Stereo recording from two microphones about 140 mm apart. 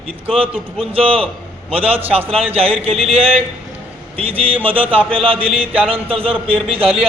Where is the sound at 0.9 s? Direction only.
45° right (ahead or behind).